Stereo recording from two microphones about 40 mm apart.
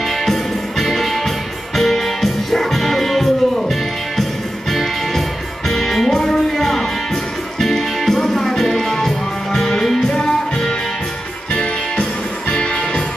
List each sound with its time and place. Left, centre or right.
0.2 s music: centre
5.7 s music: centre; by 12.7 s left